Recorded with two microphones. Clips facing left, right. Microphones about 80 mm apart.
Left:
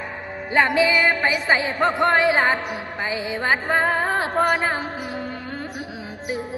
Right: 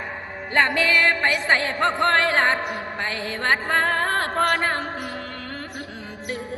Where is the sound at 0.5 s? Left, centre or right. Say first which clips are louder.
Left 2 dB; centre.